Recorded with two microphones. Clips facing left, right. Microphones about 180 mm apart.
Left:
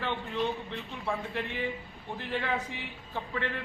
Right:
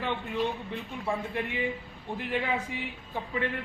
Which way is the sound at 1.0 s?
15° right (ahead or behind).